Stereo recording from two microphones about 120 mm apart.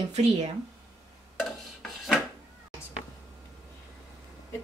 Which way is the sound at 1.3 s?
Centre (ahead or behind).